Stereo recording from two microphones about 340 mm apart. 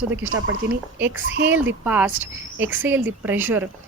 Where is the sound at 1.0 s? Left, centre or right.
Centre.